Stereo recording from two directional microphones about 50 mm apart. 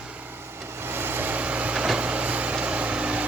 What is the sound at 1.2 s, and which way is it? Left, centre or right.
Vehicle, right.